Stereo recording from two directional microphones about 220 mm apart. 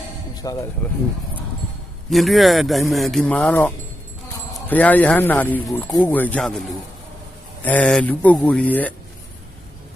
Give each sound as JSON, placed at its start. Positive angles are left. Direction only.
{"t": 0.4, "sound": "speech", "side_deg": 15}
{"t": 2.0, "sound": "speech", "side_deg": 0}
{"t": 4.7, "sound": "speech", "side_deg": 5}